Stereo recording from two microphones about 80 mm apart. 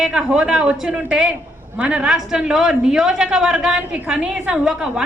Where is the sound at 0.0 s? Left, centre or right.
Centre.